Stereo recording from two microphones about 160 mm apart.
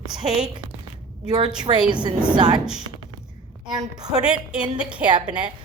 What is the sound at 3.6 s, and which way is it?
Speech, 25° right (ahead or behind).